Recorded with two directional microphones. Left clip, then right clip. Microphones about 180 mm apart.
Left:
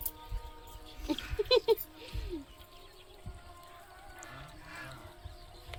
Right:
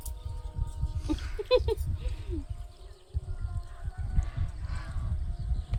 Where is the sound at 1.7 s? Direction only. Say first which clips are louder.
Left 4 dB; 55° right (ahead or behind).